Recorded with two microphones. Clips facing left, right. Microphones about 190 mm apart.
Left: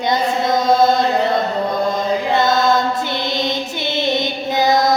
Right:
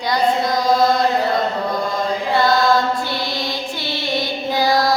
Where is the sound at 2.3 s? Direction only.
20° left (ahead or behind).